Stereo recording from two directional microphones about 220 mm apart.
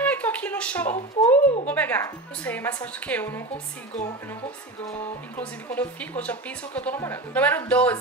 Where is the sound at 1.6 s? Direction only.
5° left (ahead or behind).